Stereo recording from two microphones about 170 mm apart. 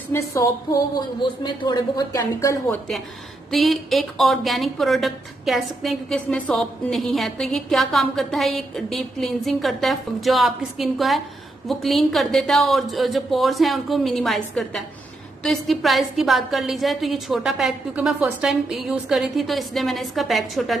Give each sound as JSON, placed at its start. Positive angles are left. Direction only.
{"t": 0.1, "sound": "music", "side_deg": 15}
{"t": 1.4, "sound": "a woman's voice", "side_deg": 25}
{"t": 3.5, "sound": "a woman's voice", "side_deg": 0}